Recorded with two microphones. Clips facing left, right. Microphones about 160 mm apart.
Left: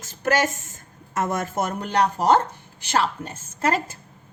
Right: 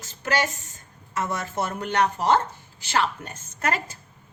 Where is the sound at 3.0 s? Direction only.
30° left (ahead or behind).